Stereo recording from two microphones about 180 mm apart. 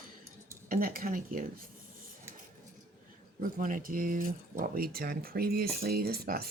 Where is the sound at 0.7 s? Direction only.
50° right (ahead or behind).